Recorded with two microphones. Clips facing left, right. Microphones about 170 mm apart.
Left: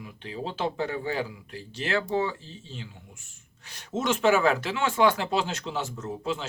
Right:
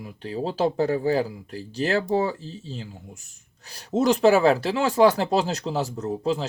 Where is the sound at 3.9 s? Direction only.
35° right (ahead or behind).